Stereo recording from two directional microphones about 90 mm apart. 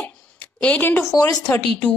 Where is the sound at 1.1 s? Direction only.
45° left (ahead or behind).